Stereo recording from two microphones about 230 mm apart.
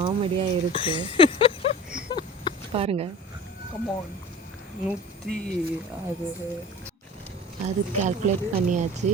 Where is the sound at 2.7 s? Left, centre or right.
Right.